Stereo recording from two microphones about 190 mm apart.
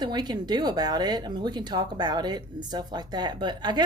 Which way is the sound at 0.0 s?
20° right (ahead or behind).